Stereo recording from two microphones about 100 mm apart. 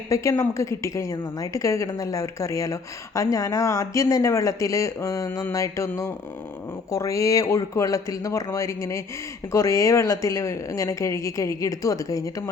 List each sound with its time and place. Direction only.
0.1 s speech: 30° left (ahead or behind)
6.9 s speech: 35° left (ahead or behind)